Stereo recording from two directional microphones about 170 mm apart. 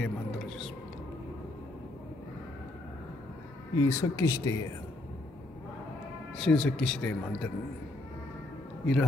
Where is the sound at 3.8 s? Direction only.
15° left (ahead or behind).